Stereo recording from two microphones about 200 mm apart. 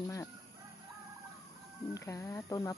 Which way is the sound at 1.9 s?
15° left (ahead or behind).